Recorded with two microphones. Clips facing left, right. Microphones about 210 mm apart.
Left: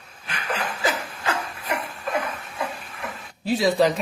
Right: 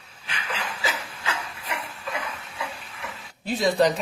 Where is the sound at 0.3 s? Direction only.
50° left (ahead or behind).